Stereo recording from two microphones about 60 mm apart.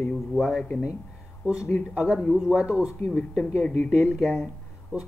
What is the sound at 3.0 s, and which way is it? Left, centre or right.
Speech, left.